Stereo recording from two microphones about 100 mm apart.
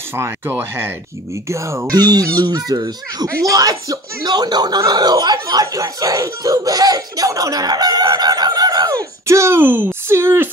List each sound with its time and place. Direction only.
0.1 s speech: 20° right (ahead or behind)
1.9 s speech: 40° right (ahead or behind); by 10.5 s 25° right (ahead or behind)